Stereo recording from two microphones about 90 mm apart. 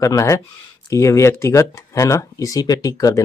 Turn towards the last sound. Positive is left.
turn(degrees=45)  # may be behind; listen again after turning